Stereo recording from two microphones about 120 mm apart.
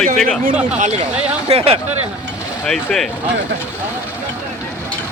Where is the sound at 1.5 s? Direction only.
50° right (ahead or behind).